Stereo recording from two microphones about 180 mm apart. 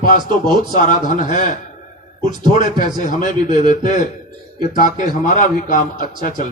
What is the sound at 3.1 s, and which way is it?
A man's voice, 45° left (ahead or behind).